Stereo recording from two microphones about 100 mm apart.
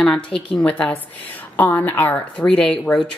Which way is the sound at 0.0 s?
10° left (ahead or behind).